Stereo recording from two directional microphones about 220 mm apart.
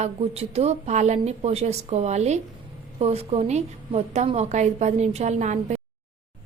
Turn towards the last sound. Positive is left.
turn(degrees=-30)  # may be behind; listen again after turning